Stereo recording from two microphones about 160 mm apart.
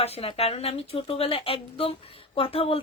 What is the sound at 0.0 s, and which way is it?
A woman's voice, 40° left (ahead or behind).